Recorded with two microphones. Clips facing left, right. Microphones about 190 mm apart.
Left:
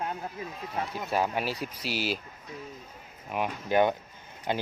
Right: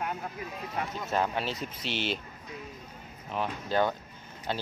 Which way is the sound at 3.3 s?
15° left (ahead or behind).